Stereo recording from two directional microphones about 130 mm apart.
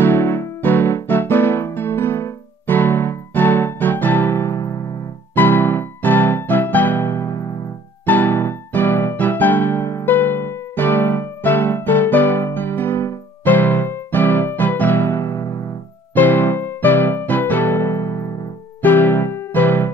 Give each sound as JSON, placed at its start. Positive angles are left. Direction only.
{"t": 0.0, "sound": "music", "side_deg": 15}